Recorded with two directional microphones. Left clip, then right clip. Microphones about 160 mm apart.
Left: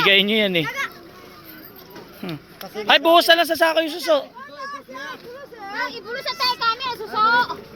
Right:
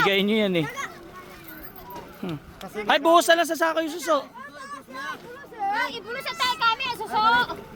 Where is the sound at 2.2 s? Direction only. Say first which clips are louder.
Left 4 dB; 15° right (ahead or behind).